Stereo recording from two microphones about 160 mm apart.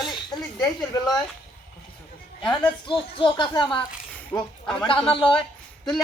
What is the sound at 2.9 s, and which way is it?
Speech, 30° left (ahead or behind).